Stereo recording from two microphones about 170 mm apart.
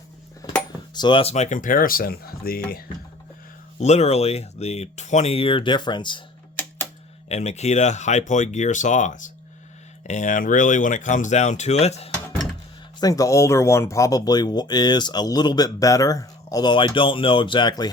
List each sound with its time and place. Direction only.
0.9 s speech: 25° left (ahead or behind); by 2.8 s 60° left (ahead or behind)
3.8 s speech: 40° left (ahead or behind)
7.3 s speech: 40° left (ahead or behind)
12.1 s a sound: 5° left (ahead or behind)
13.0 s speech: 20° left (ahead or behind)